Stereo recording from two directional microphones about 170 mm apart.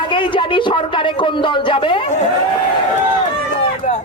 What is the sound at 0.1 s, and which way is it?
A woman's voice, 30° left (ahead or behind).